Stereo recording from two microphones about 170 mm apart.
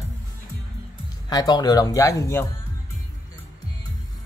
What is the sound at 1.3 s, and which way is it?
Speech, 25° left (ahead or behind).